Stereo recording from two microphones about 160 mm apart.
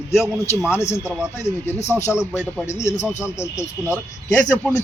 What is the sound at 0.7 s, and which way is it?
Speech, 15° left (ahead or behind).